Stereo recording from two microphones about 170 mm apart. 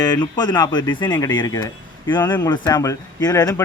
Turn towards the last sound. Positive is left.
turn(degrees=20)  # may be behind; listen again after turning